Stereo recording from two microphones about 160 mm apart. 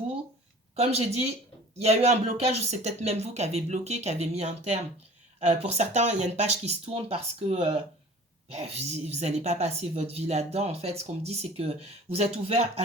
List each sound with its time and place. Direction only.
0.8 s a woman's voice: 40° right (ahead or behind)